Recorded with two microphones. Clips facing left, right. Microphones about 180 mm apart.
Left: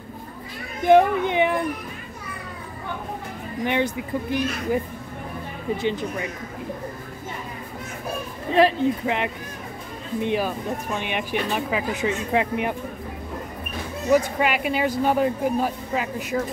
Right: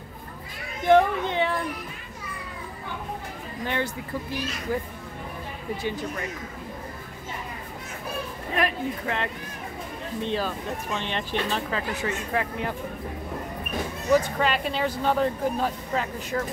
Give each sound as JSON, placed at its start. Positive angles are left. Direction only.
{"t": 0.8, "sound": "speech", "side_deg": 15}
{"t": 3.6, "sound": "speech", "side_deg": 20}
{"t": 8.6, "sound": "speech", "side_deg": 30}
{"t": 9.0, "sound": "speech", "side_deg": 15}
{"t": 14.1, "sound": "speech", "side_deg": 10}